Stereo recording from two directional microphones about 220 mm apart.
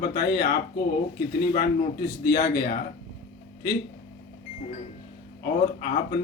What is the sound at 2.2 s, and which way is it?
Speech, 40° left (ahead or behind).